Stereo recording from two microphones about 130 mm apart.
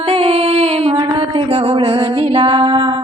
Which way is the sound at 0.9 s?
40° right (ahead or behind).